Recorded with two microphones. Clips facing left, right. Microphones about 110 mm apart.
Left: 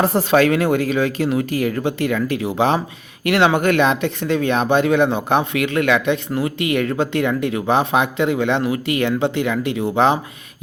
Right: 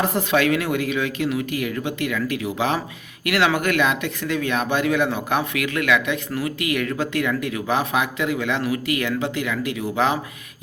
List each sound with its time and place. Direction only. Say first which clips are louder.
0.0 s speech: left 5 dB; 30° left (ahead or behind)